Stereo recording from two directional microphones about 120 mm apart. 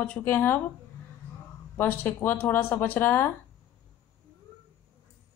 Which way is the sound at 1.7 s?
20° left (ahead or behind).